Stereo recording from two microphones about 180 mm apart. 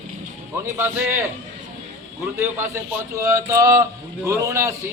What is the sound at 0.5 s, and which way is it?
Speech, 15° right (ahead or behind).